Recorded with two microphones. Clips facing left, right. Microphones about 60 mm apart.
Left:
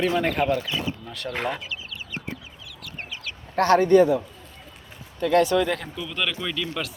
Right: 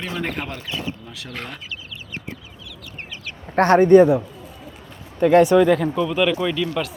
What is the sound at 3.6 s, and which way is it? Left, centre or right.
Speech, right.